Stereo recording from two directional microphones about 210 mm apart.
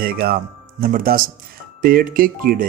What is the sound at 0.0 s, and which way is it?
Speech, 45° right (ahead or behind).